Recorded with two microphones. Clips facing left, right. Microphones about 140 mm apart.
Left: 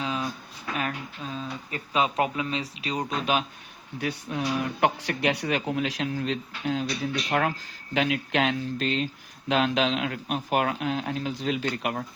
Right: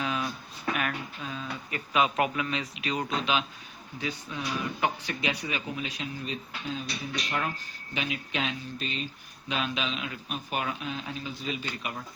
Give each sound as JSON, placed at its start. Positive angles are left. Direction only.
{"t": 0.0, "sound": "a sound", "side_deg": 25}
{"t": 0.8, "sound": "speech", "side_deg": 30}
{"t": 3.1, "sound": "speech", "side_deg": 45}
{"t": 4.0, "sound": "speech", "side_deg": 65}